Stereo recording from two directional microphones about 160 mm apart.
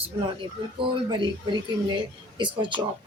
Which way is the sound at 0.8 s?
30° right (ahead or behind).